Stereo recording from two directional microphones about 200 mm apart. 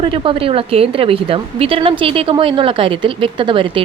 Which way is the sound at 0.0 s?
25° right (ahead or behind).